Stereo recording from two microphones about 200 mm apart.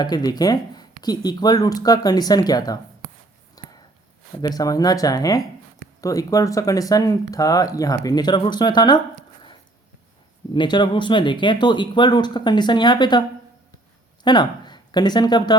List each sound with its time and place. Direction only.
0.0 s speech: 20° left (ahead or behind)
3.6 s a sound: 20° left (ahead or behind)
4.4 s speech: 20° left (ahead or behind)
10.5 s speech: 20° left (ahead or behind)
14.3 s speech: 20° left (ahead or behind)